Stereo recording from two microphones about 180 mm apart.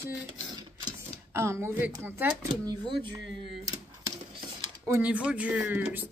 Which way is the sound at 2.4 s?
25° right (ahead or behind).